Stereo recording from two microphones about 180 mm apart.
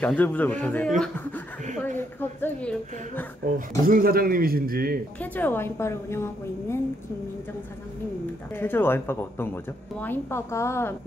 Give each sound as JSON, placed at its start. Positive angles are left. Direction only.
{"t": 0.0, "sound": "a woman's voice", "side_deg": 10}
{"t": 3.8, "sound": "a man's voice", "side_deg": -55}
{"t": 5.2, "sound": "a woman's voice", "side_deg": 10}
{"t": 8.5, "sound": "a woman's voice", "side_deg": 10}